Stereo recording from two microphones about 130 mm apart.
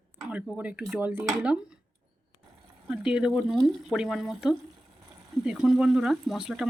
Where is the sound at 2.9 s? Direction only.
5° right (ahead or behind).